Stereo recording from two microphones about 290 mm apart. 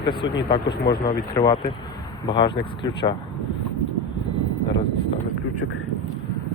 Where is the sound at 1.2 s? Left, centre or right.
Centre.